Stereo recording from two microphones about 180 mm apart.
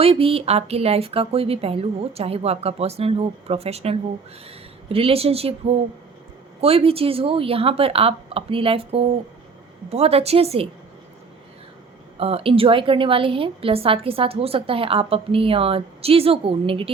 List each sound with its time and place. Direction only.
0.0 s a woman's voice: 30° right (ahead or behind)
12.1 s a woman's voice: 30° right (ahead or behind)